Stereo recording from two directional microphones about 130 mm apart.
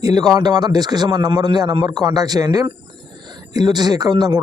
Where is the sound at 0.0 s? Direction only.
30° right (ahead or behind).